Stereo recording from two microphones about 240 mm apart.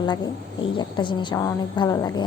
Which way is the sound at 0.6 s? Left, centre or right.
Centre.